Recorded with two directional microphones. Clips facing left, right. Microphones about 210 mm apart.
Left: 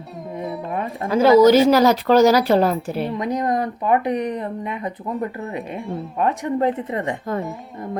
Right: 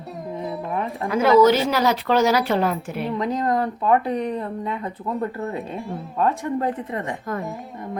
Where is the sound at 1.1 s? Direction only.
30° left (ahead or behind).